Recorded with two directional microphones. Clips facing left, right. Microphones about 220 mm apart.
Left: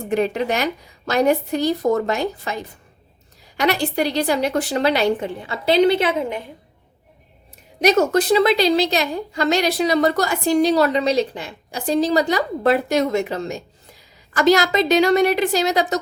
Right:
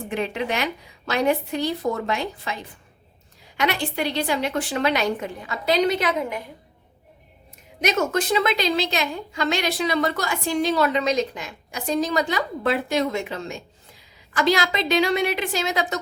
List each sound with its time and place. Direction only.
0.1 s a woman's voice: 40° left (ahead or behind)
3.6 s a woman's voice: 40° left (ahead or behind)
7.8 s a woman's voice: 35° left (ahead or behind)